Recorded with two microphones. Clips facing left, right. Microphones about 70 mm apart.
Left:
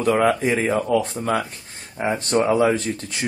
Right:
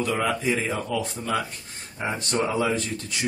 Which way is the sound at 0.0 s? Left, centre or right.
Left.